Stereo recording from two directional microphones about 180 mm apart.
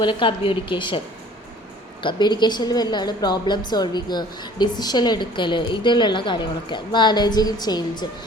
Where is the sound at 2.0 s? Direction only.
25° left (ahead or behind).